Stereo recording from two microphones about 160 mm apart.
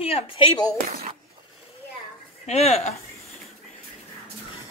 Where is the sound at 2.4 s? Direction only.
40° left (ahead or behind).